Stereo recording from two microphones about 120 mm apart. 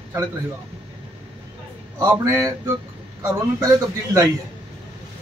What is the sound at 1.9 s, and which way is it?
A man's voice, 25° right (ahead or behind).